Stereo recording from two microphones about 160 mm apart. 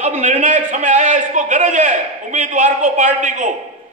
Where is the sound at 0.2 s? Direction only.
45° right (ahead or behind).